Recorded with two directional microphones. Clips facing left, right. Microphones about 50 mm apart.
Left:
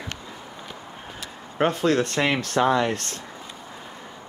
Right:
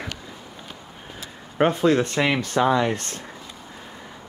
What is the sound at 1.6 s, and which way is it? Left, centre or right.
Speech, centre.